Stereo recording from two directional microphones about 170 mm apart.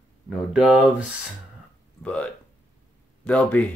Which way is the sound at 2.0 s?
5° left (ahead or behind).